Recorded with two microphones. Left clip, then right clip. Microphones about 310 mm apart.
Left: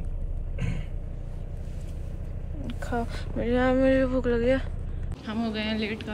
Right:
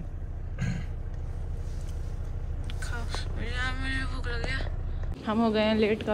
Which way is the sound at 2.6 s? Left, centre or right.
Centre.